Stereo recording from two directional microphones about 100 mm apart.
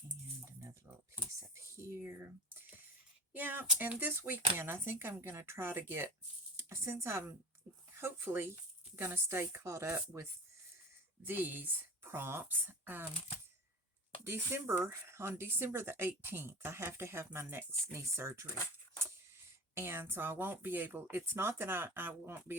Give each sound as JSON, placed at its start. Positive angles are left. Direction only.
{"t": 0.4, "sound": "music", "side_deg": -30}
{"t": 1.4, "sound": "speech", "side_deg": -30}
{"t": 11.3, "sound": "speech", "side_deg": -20}
{"t": 14.3, "sound": "speech", "side_deg": -25}
{"t": 19.7, "sound": "speech", "side_deg": -25}